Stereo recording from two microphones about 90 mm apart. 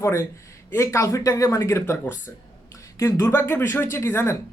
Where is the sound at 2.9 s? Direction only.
35° left (ahead or behind).